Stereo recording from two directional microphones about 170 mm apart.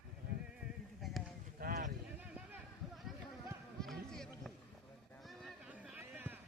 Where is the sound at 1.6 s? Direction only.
60° right (ahead or behind).